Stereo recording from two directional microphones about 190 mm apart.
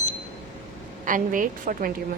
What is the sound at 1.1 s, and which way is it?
Speech, 45° right (ahead or behind).